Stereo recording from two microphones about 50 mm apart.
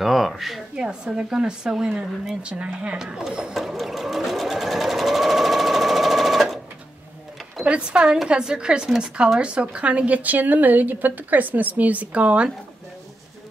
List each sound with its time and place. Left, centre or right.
0.0 s speech: centre
0.7 s speech: centre
2.4 s speech: right
3.3 s speech: centre
3.5 s sewing machine: centre
7.6 s a woman's voice: right